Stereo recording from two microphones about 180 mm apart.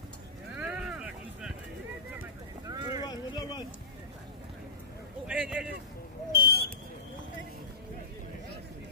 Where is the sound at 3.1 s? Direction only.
20° left (ahead or behind).